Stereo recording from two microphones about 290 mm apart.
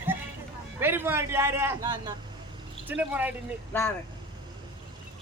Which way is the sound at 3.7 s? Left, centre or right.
Centre.